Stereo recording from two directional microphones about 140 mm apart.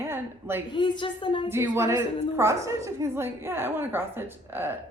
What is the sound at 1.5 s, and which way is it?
A woman's voice, 15° right (ahead or behind).